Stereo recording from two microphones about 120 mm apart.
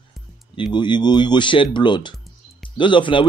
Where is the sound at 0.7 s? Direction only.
40° left (ahead or behind).